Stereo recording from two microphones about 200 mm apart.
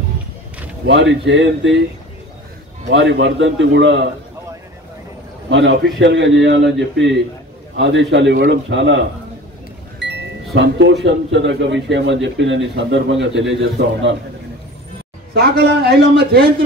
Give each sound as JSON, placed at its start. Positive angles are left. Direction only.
{"t": 0.8, "sound": "speech", "side_deg": -65}
{"t": 2.9, "sound": "speech", "side_deg": -65}
{"t": 5.5, "sound": "speech", "side_deg": -65}
{"t": 15.3, "sound": "a man's voice", "side_deg": -50}